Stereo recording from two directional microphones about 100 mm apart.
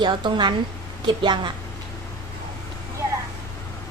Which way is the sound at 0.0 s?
50° right (ahead or behind).